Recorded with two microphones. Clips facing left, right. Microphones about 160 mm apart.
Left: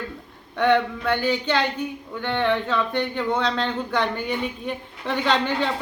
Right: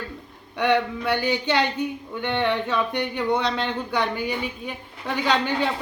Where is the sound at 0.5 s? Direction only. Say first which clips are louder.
Left 2 dB; 15° right (ahead or behind).